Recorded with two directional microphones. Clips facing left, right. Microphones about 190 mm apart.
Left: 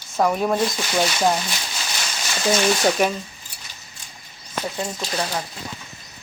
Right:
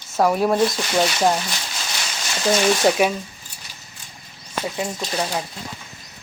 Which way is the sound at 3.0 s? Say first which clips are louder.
Right 1 dB; 5° right (ahead or behind).